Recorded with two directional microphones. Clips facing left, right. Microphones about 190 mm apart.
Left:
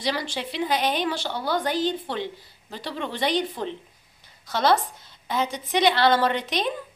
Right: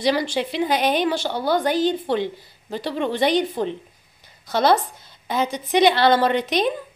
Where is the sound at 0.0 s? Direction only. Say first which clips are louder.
Right 7 dB; 15° right (ahead or behind).